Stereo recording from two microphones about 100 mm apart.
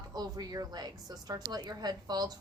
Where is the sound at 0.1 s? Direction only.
40° right (ahead or behind).